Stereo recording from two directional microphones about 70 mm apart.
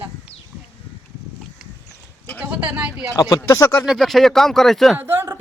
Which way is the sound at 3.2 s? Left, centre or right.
Left.